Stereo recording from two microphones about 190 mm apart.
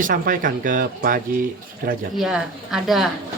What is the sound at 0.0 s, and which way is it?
Speech, 45° right (ahead or behind).